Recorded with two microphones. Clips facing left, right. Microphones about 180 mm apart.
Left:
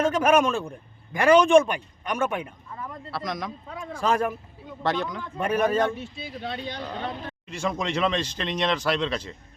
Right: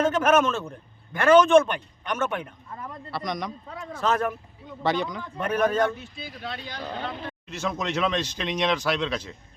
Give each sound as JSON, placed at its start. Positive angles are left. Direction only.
{"t": 0.0, "sound": "a man's voice", "side_deg": 10}
{"t": 5.8, "sound": "speech", "side_deg": 25}
{"t": 7.0, "sound": "speech", "side_deg": 0}